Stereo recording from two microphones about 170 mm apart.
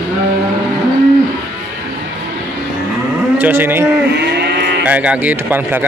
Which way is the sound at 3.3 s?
10° right (ahead or behind).